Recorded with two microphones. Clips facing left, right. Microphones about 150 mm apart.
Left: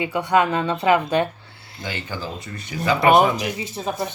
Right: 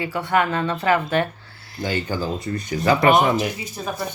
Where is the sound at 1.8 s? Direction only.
40° right (ahead or behind).